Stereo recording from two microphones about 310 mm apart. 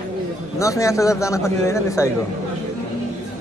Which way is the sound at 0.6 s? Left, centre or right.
Centre.